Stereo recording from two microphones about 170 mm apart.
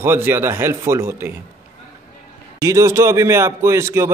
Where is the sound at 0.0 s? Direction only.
15° right (ahead or behind).